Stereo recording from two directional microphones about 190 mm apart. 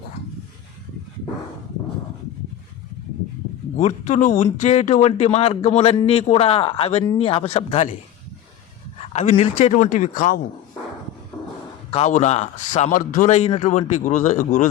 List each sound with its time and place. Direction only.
3.8 s a man's voice: 40° left (ahead or behind)
9.0 s a man's voice: 35° left (ahead or behind)
11.9 s a man's voice: 35° left (ahead or behind)